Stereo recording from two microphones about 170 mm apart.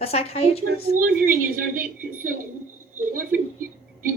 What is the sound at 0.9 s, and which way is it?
Speech, 60° right (ahead or behind).